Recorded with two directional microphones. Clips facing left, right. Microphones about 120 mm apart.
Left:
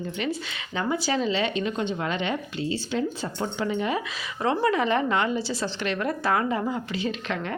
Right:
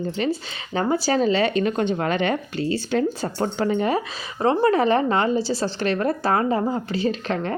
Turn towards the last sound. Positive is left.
turn(degrees=-35)  # may be behind; listen again after turning